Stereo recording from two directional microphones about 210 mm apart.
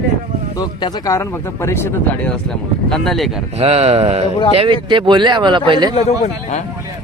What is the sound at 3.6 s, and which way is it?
Speech, 30° right (ahead or behind).